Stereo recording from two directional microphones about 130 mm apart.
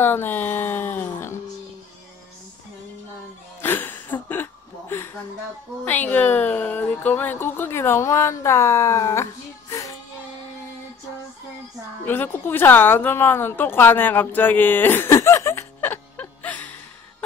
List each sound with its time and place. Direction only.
0.0 s speech: 15° left (ahead or behind)
3.6 s a sound: 15° left (ahead or behind)
5.9 s speech: 10° left (ahead or behind)
12.0 s speech: 15° left (ahead or behind)